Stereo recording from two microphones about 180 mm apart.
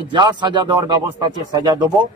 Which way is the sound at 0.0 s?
25° right (ahead or behind).